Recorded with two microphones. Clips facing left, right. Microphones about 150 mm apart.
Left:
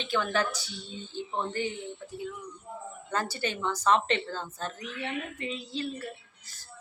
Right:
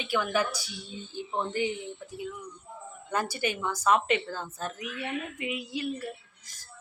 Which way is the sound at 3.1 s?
15° right (ahead or behind).